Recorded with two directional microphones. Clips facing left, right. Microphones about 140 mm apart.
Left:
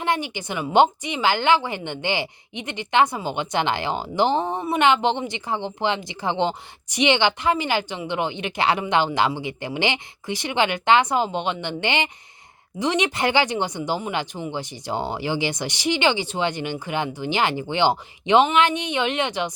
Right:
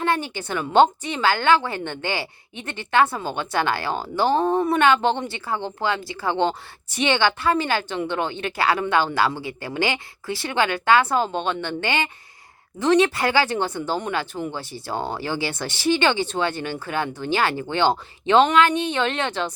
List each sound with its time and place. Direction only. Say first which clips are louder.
0.0 s a woman's voice: right 1 dB; 15° left (ahead or behind)